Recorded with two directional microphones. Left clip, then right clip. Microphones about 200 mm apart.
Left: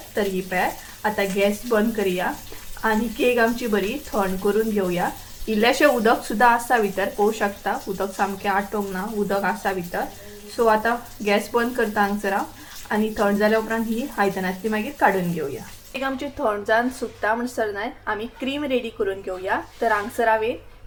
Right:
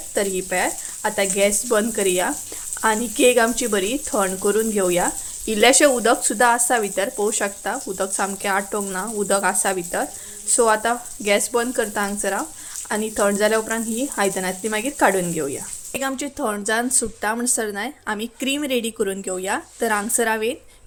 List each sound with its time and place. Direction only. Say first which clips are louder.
0.1 s speech: right 2 dB; 45° right (ahead or behind)